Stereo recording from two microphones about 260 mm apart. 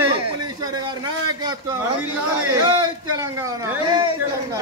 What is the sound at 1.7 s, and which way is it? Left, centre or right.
A man's voice, centre.